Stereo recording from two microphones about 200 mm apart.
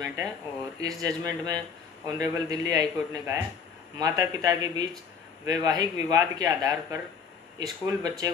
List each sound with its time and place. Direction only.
0.0 s speech: 15° right (ahead or behind)